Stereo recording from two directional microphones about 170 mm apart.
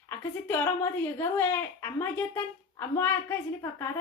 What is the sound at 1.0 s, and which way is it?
A child's voice, 10° left (ahead or behind).